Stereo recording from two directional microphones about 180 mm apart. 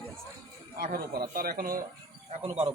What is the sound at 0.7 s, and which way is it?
A man's voice, 50° right (ahead or behind).